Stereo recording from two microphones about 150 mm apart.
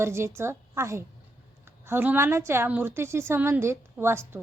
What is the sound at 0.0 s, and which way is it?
A woman's voice, 15° right (ahead or behind).